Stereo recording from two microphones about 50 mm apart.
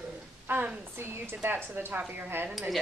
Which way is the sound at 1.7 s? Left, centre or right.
Right.